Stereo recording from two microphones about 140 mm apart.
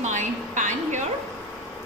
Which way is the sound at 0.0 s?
60° right (ahead or behind).